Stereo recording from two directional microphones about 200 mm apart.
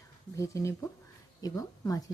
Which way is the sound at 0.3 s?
15° left (ahead or behind).